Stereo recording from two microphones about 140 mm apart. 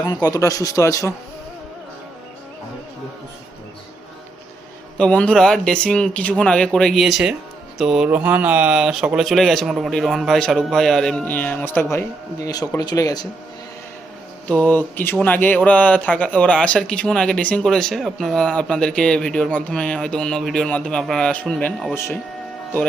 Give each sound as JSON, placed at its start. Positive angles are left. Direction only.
{"t": 0.0, "sound": "speech", "side_deg": 25}
{"t": 4.9, "sound": "speech", "side_deg": 10}
{"t": 12.5, "sound": "speech", "side_deg": 25}
{"t": 14.4, "sound": "speech", "side_deg": 10}
{"t": 21.9, "sound": "speech", "side_deg": 20}